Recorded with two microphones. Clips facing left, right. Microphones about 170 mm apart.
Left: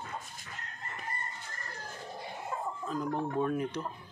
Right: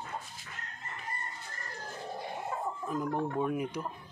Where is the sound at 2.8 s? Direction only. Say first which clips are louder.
Right 1 dB; 15° right (ahead or behind).